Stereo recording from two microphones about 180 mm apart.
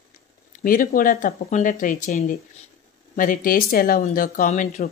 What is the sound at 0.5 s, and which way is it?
Speech, 50° left (ahead or behind).